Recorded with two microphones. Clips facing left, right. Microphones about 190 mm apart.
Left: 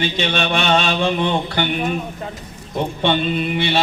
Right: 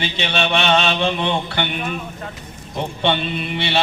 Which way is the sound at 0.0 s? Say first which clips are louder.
Left 2 dB; 45° left (ahead or behind).